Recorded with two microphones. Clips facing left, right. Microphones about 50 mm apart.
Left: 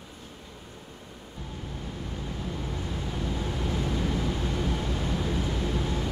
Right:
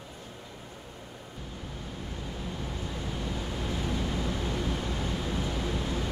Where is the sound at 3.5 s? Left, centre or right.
Left.